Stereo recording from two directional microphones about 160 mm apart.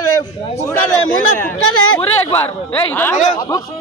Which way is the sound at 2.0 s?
10° left (ahead or behind).